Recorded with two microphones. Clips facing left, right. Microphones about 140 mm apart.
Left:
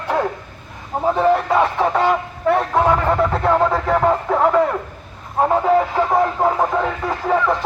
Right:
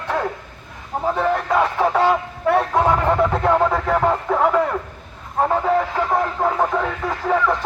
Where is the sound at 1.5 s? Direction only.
Centre (ahead or behind).